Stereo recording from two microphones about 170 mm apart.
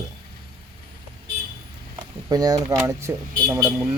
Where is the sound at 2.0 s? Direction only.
20° right (ahead or behind).